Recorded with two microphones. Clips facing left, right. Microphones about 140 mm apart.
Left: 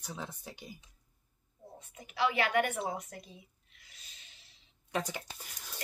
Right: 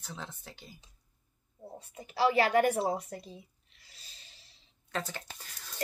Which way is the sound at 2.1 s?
35° right (ahead or behind).